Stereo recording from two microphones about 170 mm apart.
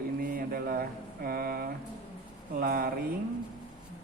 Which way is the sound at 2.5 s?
60° right (ahead or behind).